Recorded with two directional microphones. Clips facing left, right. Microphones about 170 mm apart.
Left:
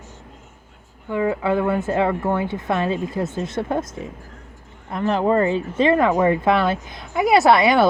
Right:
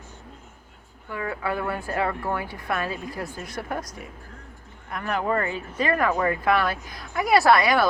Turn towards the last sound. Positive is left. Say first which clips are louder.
# left 4 dB
turn(degrees=25)  # may be behind; listen again after turning